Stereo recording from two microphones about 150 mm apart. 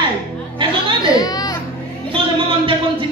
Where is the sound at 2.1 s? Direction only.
35° right (ahead or behind).